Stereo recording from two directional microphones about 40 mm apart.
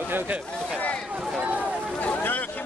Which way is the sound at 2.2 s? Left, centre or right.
Left.